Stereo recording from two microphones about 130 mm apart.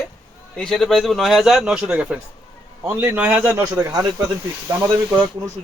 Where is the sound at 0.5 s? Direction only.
5° left (ahead or behind); by 4.0 s 25° right (ahead or behind).